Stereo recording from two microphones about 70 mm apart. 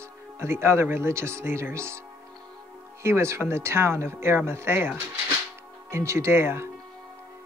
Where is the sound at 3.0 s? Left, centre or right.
Right.